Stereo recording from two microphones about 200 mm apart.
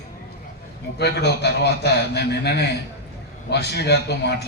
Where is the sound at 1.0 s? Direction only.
55° left (ahead or behind).